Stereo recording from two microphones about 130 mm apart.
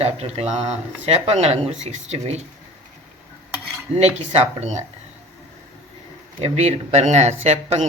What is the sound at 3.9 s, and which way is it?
Speech, 55° right (ahead or behind).